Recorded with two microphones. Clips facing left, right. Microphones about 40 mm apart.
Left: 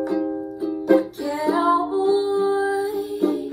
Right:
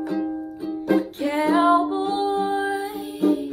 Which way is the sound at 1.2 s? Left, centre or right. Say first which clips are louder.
Right 2 dB; right.